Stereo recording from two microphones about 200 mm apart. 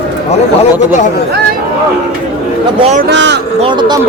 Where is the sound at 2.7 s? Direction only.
30° right (ahead or behind).